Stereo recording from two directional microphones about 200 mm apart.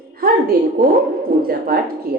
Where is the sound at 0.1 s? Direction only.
50° right (ahead or behind).